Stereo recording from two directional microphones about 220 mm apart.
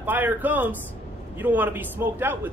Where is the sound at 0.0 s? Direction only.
10° right (ahead or behind).